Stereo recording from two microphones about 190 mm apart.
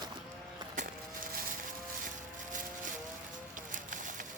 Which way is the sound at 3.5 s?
45° right (ahead or behind).